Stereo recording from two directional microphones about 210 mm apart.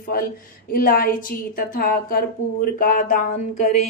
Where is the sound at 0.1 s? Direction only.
45° left (ahead or behind).